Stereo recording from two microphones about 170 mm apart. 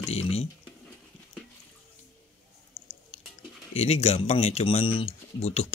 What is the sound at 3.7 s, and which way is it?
Speech, 40° left (ahead or behind).